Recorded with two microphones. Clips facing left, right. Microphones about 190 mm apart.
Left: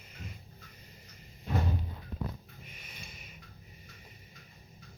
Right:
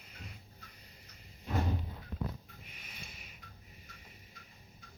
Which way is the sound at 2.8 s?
Centre (ahead or behind).